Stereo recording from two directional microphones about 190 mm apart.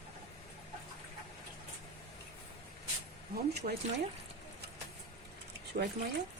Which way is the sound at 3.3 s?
60° right (ahead or behind).